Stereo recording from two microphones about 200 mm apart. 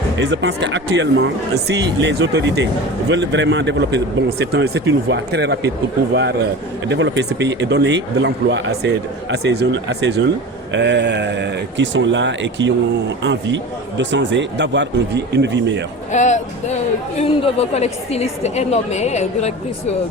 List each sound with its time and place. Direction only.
0.2 s a man's voice: 60° right (ahead or behind)
6.9 s a man's voice: 60° right (ahead or behind)
16.1 s a woman's voice: 35° left (ahead or behind)